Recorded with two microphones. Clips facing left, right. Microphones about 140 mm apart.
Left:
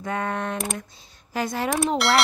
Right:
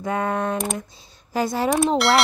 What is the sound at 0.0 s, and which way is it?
A woman's voice, 25° right (ahead or behind).